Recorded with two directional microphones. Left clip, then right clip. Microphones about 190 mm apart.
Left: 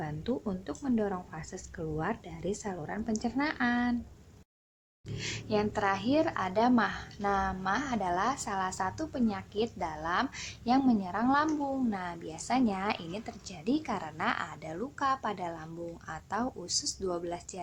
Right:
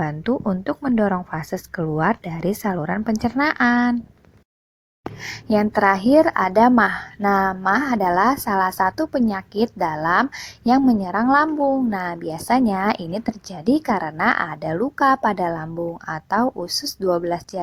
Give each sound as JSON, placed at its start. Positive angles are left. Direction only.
{"t": 0.0, "sound": "a woman's voice", "side_deg": -35}
{"t": 5.2, "sound": "a woman's voice", "side_deg": -40}